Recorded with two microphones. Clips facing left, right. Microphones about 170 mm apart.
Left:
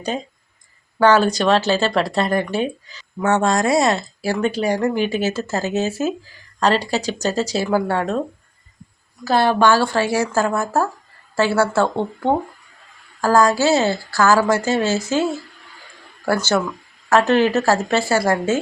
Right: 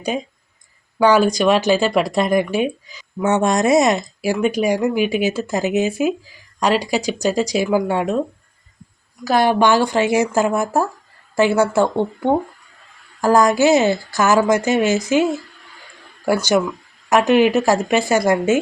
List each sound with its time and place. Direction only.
0.9 s speech: 10° right (ahead or behind)
9.2 s speech: 15° right (ahead or behind)